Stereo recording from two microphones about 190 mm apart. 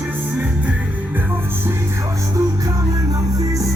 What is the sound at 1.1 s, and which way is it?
Music, 10° right (ahead or behind).